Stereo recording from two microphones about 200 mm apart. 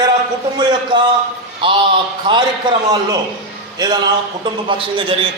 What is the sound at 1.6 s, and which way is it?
A man's voice, 25° right (ahead or behind).